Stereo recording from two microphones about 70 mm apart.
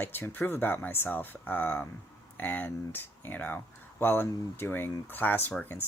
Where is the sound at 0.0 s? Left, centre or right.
Left.